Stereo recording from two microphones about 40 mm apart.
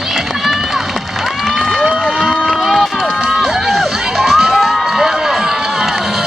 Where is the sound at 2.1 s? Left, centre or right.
Centre.